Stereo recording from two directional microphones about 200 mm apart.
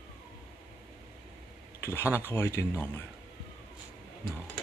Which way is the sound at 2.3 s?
10° left (ahead or behind).